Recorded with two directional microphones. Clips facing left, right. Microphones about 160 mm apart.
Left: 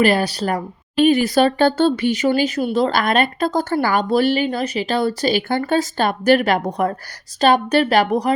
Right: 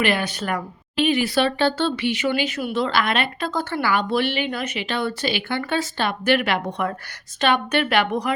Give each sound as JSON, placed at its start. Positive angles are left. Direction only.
{"t": 0.0, "sound": "speech", "side_deg": 35}